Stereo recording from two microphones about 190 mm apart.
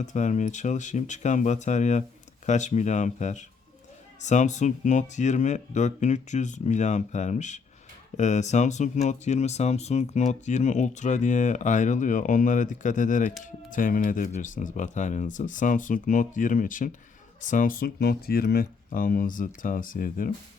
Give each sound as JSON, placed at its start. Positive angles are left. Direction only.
{"t": 0.0, "sound": "speech", "side_deg": 40}